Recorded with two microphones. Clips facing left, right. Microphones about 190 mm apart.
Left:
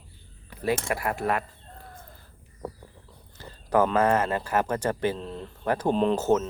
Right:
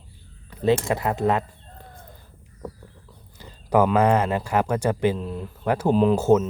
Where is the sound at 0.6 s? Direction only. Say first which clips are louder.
Right 6 dB; 20° right (ahead or behind).